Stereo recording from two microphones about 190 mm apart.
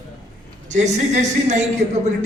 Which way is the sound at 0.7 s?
40° right (ahead or behind).